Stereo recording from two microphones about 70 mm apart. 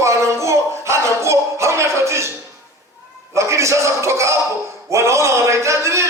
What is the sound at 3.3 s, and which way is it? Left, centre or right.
Speech, right.